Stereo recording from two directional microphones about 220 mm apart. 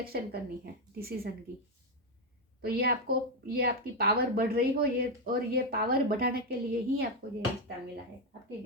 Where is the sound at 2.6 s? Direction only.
45° right (ahead or behind).